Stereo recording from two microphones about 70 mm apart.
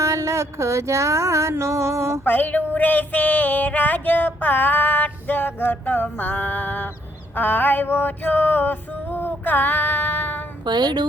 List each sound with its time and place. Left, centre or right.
0.0 s a sound: right
2.2 s female singing: left
10.7 s a woman's voice: right